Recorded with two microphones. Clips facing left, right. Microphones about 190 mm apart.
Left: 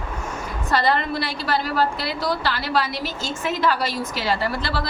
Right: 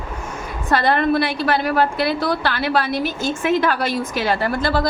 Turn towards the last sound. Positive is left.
turn(degrees=-50)  # may be behind; listen again after turning